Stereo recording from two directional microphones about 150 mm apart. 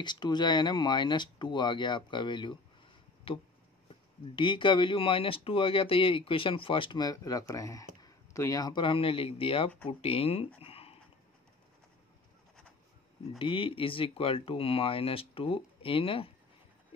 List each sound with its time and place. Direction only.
0.0 s speech: 30° left (ahead or behind)
10.6 s a sound: 40° left (ahead or behind)
13.4 s speech: 35° left (ahead or behind)